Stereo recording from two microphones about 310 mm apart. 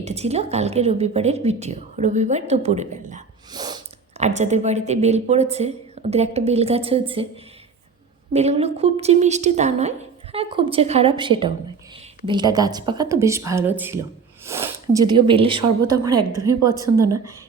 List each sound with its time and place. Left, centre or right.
0.0 s a woman's voice: right
8.3 s a woman's voice: right